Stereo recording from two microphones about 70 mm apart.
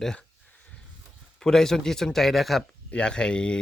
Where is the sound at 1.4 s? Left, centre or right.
Centre.